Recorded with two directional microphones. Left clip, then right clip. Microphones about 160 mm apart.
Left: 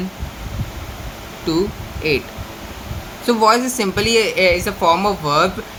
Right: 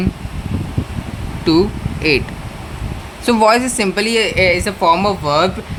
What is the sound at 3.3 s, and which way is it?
A woman's voice, 60° right (ahead or behind).